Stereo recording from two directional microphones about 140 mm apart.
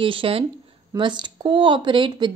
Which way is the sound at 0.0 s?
40° right (ahead or behind).